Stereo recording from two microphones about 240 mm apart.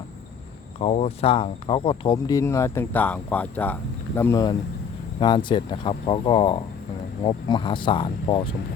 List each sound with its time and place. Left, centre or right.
0.8 s speech: left